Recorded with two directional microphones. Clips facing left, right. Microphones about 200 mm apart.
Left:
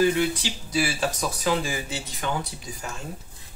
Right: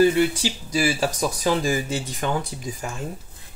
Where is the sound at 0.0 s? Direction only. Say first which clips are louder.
Right 4 dB; 45° right (ahead or behind).